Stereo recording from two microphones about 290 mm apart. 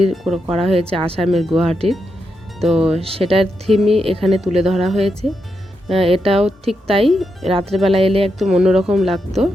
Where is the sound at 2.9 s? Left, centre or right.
Centre.